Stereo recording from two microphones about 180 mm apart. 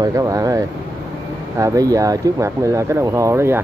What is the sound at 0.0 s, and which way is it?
Speech, 20° right (ahead or behind).